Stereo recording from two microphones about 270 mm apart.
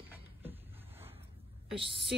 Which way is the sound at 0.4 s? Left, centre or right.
Centre.